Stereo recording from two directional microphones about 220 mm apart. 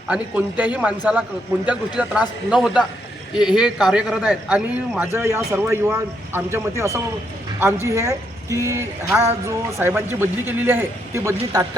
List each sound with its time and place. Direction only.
0.1 s a man's voice: 5° right (ahead or behind)